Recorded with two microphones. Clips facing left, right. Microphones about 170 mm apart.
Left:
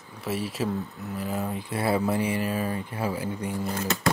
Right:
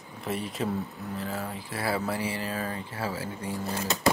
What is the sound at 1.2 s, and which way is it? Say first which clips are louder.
Speech: left 6 dB; 20° left (ahead or behind).